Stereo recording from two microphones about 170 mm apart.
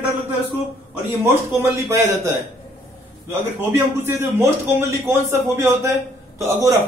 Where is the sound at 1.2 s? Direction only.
15° right (ahead or behind).